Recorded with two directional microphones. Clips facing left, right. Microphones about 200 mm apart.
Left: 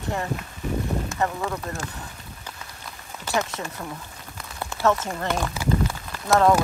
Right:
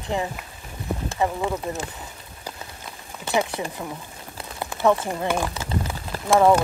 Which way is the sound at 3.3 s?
15° right (ahead or behind).